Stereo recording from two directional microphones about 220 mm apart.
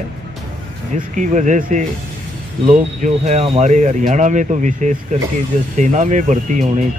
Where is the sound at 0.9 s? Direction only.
35° right (ahead or behind).